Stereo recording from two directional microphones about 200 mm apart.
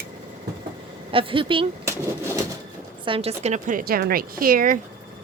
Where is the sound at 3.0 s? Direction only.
30° right (ahead or behind); by 4.8 s 45° right (ahead or behind).